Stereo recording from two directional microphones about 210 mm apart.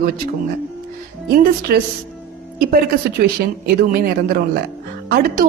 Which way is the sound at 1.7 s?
45° right (ahead or behind).